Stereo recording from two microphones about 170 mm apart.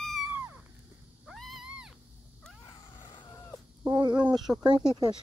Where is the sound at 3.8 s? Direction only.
25° right (ahead or behind).